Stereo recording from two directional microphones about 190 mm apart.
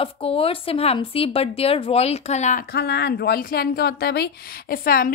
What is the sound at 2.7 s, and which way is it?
Speech, 60° left (ahead or behind).